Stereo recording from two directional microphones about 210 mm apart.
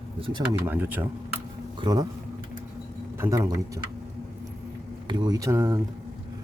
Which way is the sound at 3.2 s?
15° right (ahead or behind).